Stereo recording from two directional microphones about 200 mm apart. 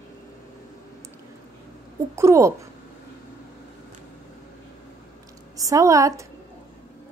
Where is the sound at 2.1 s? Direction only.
15° right (ahead or behind).